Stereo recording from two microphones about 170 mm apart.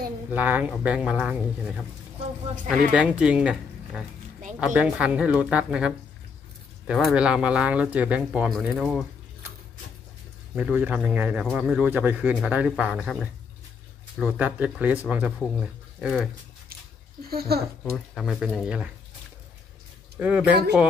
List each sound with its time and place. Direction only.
0.3 s speech: 10° right (ahead or behind)
2.9 s speech: 5° right (ahead or behind)
10.5 s speech: 10° right (ahead or behind)
17.3 s speech: 65° right (ahead or behind)
17.9 s speech: centre (ahead or behind)
20.2 s speech: 5° right (ahead or behind)